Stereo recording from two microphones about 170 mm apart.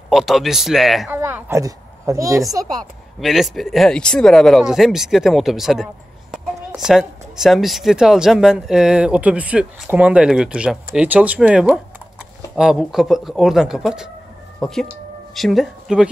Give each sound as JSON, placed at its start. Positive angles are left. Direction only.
{"t": 0.1, "sound": "speech", "side_deg": 0}
{"t": 1.1, "sound": "speech", "side_deg": -15}
{"t": 3.2, "sound": "speech", "side_deg": 0}